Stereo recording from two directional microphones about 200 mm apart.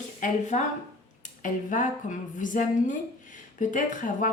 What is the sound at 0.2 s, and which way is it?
A woman's voice, 35° left (ahead or behind).